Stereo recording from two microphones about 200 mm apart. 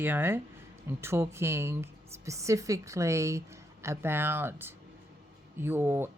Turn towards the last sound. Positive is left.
turn(degrees=-10)  # may be behind; listen again after turning